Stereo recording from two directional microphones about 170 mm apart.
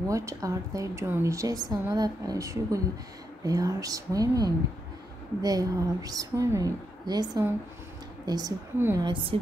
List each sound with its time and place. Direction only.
0.1 s a woman's voice: 20° right (ahead or behind)
8.7 s a woman's voice: 10° right (ahead or behind)
9.0 s a woman's voice: 30° right (ahead or behind)